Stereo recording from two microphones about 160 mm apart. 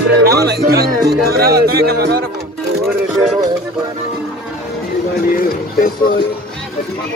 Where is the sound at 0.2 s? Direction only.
85° right.